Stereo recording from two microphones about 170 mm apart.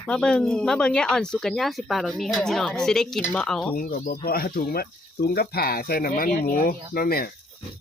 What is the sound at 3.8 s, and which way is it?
Speech, 60° left (ahead or behind).